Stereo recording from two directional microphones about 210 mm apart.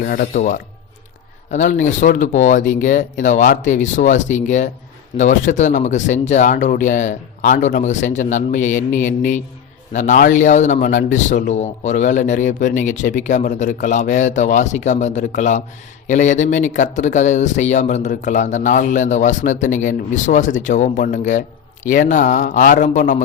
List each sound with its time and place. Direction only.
0.0 s a man's voice: 45° left (ahead or behind)